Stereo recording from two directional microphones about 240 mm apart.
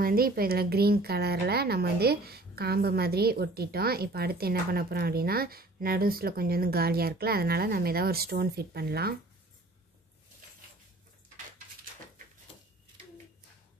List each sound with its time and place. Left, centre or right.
0.0 s a woman's voice: right